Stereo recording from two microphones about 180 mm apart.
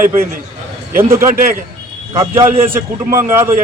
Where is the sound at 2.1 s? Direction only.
15° right (ahead or behind).